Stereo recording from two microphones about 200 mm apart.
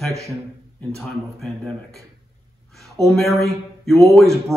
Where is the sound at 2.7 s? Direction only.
Centre (ahead or behind).